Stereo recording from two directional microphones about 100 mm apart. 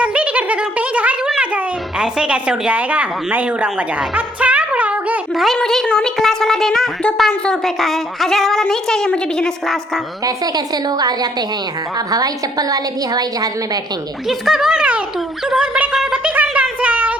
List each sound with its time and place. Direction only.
0.0 s a sound: 15° right (ahead or behind)
1.4 s a child's voice: 10° right (ahead or behind)
5.3 s a woman's voice: centre (ahead or behind)
10.2 s a woman's voice: 40° right (ahead or behind)
14.3 s speech: 5° right (ahead or behind)
15.4 s a sound: 5° right (ahead or behind)